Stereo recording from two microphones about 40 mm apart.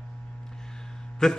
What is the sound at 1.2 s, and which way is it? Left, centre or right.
Speech, centre.